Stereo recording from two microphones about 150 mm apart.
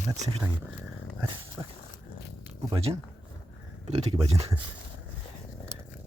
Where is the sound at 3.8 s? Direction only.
45° right (ahead or behind).